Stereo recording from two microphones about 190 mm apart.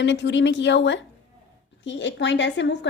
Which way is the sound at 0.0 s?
70° left (ahead or behind).